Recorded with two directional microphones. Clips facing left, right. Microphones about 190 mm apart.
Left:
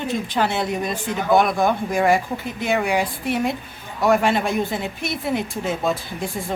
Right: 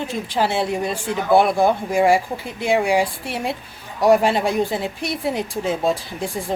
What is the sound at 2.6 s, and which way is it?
Speech, 30° right (ahead or behind).